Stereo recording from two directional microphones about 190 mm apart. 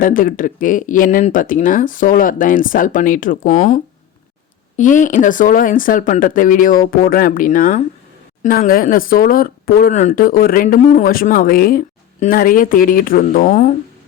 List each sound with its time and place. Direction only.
0.0 s speech: 45° left (ahead or behind)
4.8 s speech: 45° left (ahead or behind)